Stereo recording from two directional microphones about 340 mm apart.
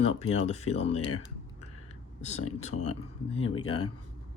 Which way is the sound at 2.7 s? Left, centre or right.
Left.